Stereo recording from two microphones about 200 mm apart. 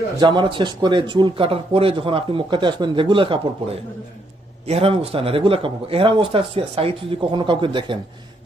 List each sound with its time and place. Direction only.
0.2 s speech: 25° right (ahead or behind)